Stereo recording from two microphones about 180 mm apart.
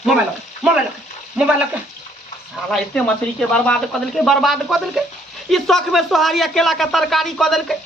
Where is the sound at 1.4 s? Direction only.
5° right (ahead or behind).